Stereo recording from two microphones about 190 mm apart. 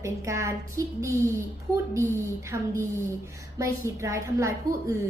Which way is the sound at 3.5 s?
15° right (ahead or behind).